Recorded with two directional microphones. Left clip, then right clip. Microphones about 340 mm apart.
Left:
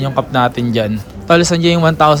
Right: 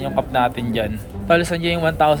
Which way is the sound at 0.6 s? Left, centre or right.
Centre.